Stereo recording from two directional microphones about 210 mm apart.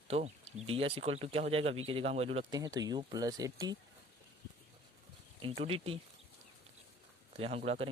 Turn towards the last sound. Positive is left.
turn(degrees=-30)  # may be behind; listen again after turning